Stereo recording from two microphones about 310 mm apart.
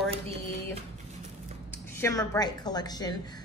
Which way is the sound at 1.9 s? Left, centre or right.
Centre.